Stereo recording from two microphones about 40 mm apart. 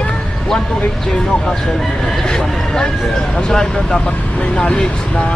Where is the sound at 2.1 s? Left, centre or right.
Centre.